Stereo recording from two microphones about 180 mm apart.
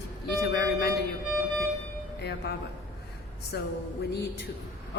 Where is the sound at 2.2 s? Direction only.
65° left (ahead or behind).